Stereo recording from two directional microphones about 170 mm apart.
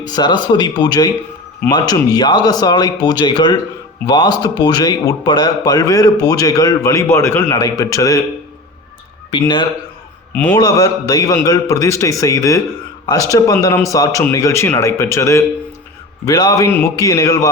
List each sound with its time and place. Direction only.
0.1 s a man's voice: 25° left (ahead or behind)
9.3 s a man's voice: 25° left (ahead or behind)